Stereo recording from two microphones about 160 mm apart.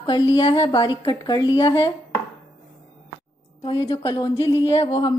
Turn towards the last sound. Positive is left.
turn(degrees=30)  # may be behind; listen again after turning